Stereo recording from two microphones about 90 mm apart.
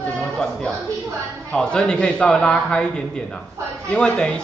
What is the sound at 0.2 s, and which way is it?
Chatter, 5° left (ahead or behind).